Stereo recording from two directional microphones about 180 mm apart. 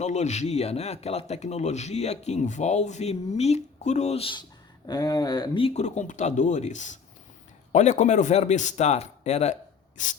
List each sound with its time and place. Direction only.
0.0 s speech: 40° left (ahead or behind)